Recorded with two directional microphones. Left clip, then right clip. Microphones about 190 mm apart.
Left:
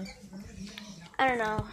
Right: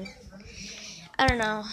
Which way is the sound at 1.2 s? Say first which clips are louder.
Right 3 dB; 20° right (ahead or behind).